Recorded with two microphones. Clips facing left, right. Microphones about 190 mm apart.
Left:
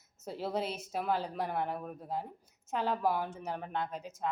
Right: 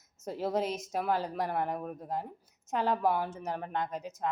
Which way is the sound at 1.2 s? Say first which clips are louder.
Right 2 dB; 5° right (ahead or behind).